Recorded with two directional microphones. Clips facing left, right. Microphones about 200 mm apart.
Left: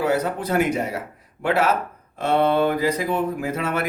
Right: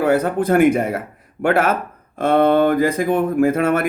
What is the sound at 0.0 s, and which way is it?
Speech, 55° right (ahead or behind).